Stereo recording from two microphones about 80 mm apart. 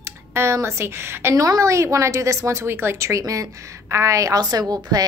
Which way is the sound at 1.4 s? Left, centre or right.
Right.